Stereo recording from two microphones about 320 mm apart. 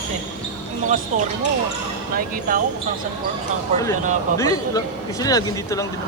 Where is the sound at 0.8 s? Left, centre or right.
Right.